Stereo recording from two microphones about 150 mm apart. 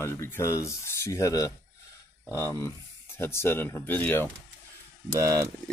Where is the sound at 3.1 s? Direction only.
15° left (ahead or behind).